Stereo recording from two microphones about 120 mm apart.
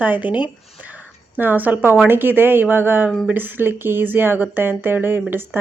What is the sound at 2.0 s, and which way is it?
Speech, 15° right (ahead or behind).